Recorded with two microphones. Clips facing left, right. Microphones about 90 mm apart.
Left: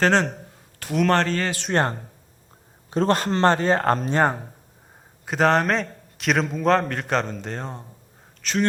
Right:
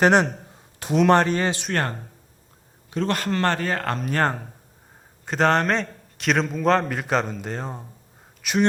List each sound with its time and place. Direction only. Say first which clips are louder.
0.0 s speech: right 2 dB; 15° right (ahead or behind)
1.7 s a man's voice: left 3 dB; 25° left (ahead or behind)
4.1 s speech: even; 15° left (ahead or behind)
5.2 s a man's voice: left 1 dB; 5° left (ahead or behind)
8.4 s speech: right 2 dB; 15° right (ahead or behind)